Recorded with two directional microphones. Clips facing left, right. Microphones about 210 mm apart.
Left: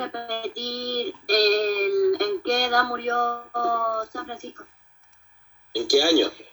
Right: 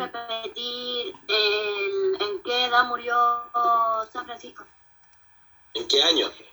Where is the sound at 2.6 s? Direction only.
40° left (ahead or behind).